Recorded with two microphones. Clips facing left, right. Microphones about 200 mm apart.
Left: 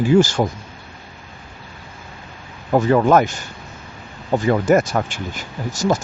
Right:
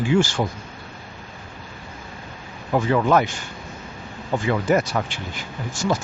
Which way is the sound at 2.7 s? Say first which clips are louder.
Left 4 dB; 45° left (ahead or behind).